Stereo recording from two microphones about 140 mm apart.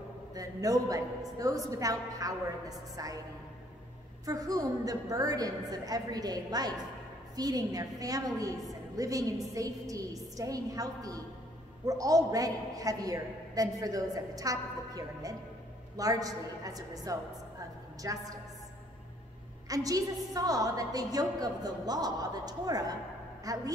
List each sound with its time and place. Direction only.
0.3 s a man's voice: 25° right (ahead or behind)
4.3 s a man's voice: 25° right (ahead or behind)
19.7 s a man's voice: 25° right (ahead or behind)